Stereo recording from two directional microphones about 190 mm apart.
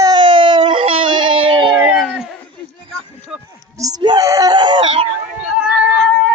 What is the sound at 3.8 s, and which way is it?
Speech, 20° right (ahead or behind).